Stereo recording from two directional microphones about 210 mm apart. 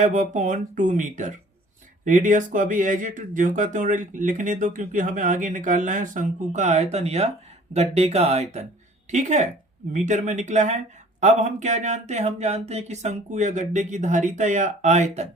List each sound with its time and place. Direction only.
0.0 s speech: 35° right (ahead or behind)